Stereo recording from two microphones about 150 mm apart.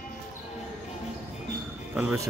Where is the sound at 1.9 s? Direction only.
10° right (ahead or behind).